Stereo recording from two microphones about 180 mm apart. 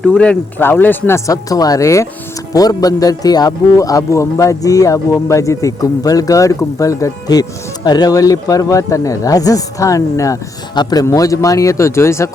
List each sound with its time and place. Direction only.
0.0 s speech: 5° left (ahead or behind)